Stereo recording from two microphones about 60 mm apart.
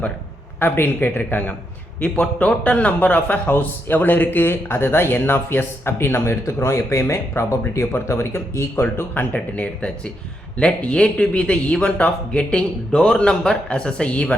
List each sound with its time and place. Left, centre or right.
0.6 s a man's voice: left
2.0 s a man's voice: left
9.3 s a man's voice: left